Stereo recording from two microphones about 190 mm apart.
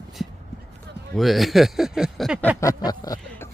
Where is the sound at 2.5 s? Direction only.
20° left (ahead or behind).